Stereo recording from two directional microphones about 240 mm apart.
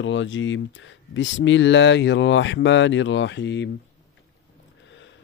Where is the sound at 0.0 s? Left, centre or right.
Left.